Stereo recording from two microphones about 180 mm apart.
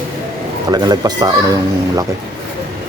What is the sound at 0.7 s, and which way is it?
Speech, 20° right (ahead or behind).